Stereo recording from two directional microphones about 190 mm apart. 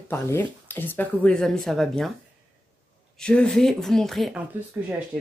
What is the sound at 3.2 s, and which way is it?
Speech, 5° left (ahead or behind).